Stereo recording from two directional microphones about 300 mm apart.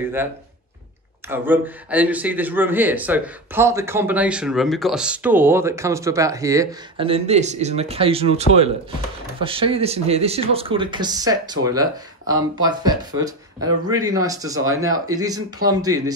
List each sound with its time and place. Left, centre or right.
1.3 s speech: centre